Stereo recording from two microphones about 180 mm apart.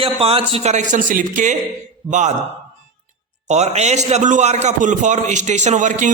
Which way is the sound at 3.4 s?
40° right (ahead or behind).